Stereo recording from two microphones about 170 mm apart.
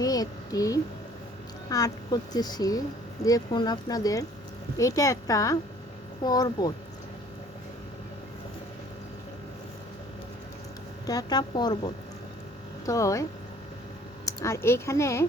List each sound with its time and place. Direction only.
0.0 s a sound: 20° left (ahead or behind)
1.7 s speech: 20° left (ahead or behind)
11.0 s speech: 20° left (ahead or behind)
14.3 s speech: 15° left (ahead or behind)